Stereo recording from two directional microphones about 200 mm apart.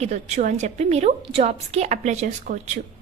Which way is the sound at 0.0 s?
35° right (ahead or behind).